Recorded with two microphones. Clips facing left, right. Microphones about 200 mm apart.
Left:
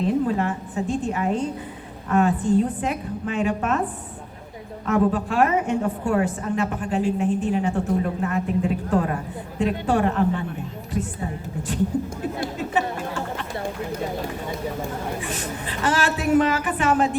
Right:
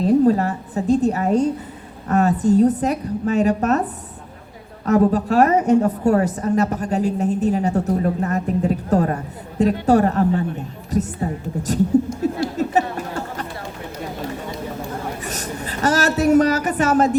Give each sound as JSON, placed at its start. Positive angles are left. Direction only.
{"t": 0.0, "sound": "a woman's voice", "side_deg": -40}
{"t": 4.9, "sound": "a woman's voice", "side_deg": -40}
{"t": 12.5, "sound": "chatter", "side_deg": -40}
{"t": 15.2, "sound": "a woman's voice", "side_deg": -40}